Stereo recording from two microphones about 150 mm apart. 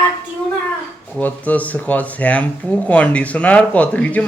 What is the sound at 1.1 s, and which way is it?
Speech, 10° left (ahead or behind).